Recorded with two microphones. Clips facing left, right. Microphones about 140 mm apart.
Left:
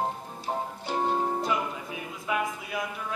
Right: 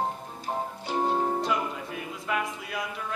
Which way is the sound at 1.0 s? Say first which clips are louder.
Right 1 dB; 5° right (ahead or behind).